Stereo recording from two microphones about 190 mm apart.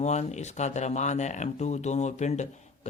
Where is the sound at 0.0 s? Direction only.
35° left (ahead or behind).